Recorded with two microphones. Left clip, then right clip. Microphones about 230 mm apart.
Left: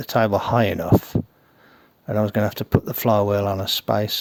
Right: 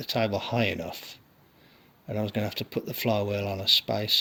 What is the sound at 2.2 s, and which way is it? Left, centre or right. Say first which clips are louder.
Speech: left 9 dB; left.